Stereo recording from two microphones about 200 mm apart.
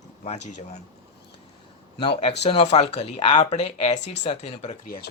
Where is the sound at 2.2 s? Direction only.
30° left (ahead or behind).